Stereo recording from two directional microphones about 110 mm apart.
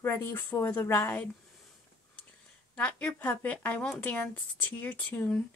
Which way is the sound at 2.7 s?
15° left (ahead or behind).